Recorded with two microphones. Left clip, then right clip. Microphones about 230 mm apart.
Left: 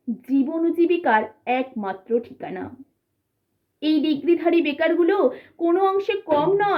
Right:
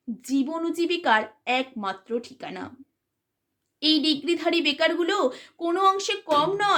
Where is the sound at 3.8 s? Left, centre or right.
Centre.